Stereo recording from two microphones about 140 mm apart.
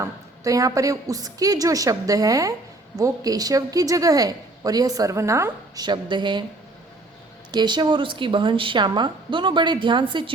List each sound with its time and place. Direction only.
0.0 s a woman's voice: 25° right (ahead or behind)
7.5 s a woman's voice: 30° right (ahead or behind)